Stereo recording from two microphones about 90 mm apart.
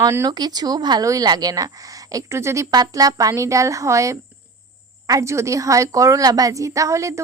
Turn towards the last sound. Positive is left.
turn(degrees=-35)  # may be behind; listen again after turning